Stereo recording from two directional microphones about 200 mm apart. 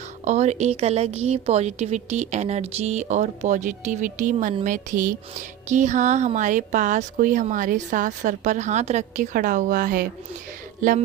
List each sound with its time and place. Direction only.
0.3 s speech: 35° right (ahead or behind)